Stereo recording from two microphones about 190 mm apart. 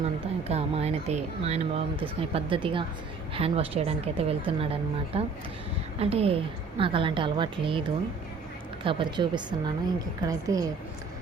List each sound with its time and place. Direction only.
0.0 s a woman's voice: 35° right (ahead or behind); by 10.7 s 20° right (ahead or behind)